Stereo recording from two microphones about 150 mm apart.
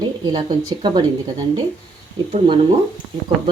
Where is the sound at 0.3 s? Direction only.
30° right (ahead or behind).